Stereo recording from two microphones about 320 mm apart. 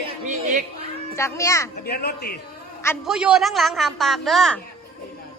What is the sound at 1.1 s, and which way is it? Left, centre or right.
Speech, centre.